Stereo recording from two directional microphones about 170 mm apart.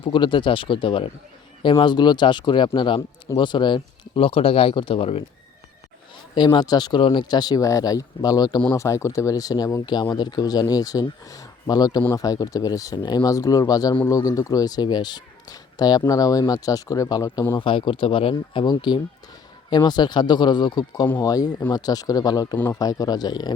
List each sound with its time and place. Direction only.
0.0 s speech: 30° left (ahead or behind)
6.3 s speech: 25° left (ahead or behind)
17.6 s speech: 30° left (ahead or behind)
22.5 s speech: 10° left (ahead or behind)
22.8 s speech: 20° left (ahead or behind)